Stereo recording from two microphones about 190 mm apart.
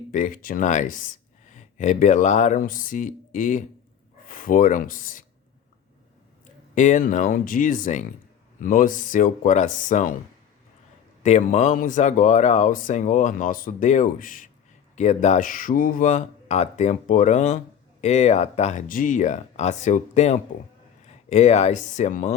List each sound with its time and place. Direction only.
0.1 s speech: 45° left (ahead or behind)
6.7 s speech: 40° left (ahead or behind)
11.2 s speech: 40° left (ahead or behind)